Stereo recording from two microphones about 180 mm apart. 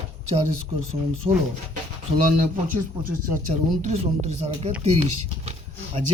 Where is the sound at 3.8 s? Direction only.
40° right (ahead or behind).